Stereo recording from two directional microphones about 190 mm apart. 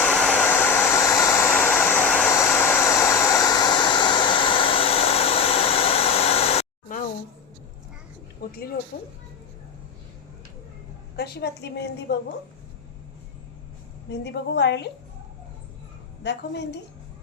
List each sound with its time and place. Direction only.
0.0 s hair dryer: 5° left (ahead or behind); by 7.0 s 40° left (ahead or behind)
8.4 s a sound: 60° left (ahead or behind)
8.9 s speech: 45° left (ahead or behind)
11.2 s a woman's voice: 60° left (ahead or behind)
14.1 s a woman's voice: 65° left (ahead or behind)
16.2 s a woman's voice: 65° left (ahead or behind)